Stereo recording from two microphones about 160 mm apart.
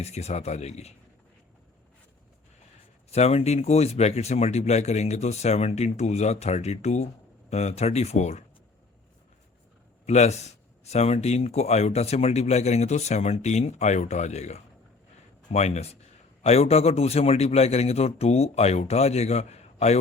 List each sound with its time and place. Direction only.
0.0 s speech: 40° left (ahead or behind)
3.1 s speech: 40° left (ahead or behind)
10.1 s a man's voice: 45° left (ahead or behind)